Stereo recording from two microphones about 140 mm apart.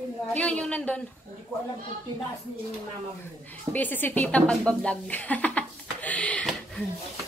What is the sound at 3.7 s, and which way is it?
A woman's voice, 15° left (ahead or behind).